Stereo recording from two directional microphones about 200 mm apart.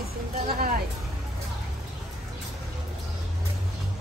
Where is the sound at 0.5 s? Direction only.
50° right (ahead or behind).